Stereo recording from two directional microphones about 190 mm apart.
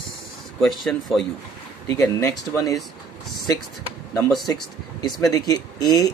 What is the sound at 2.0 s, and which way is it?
Speech, 15° left (ahead or behind).